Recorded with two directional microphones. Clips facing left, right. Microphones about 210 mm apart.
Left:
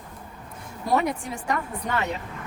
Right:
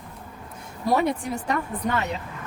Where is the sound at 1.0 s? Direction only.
35° right (ahead or behind).